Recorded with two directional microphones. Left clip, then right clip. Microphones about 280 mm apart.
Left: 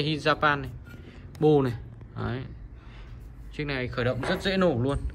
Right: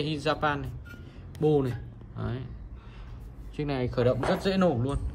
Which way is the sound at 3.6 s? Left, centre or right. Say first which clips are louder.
Right 1 dB; centre.